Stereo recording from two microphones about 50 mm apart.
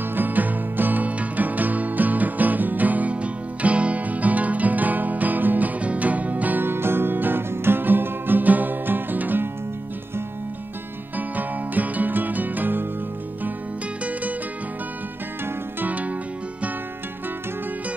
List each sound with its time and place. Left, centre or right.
0.1 s music: right
6.6 s music: right
11.1 s music: right